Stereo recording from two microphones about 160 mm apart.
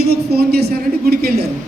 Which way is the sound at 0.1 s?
80° right.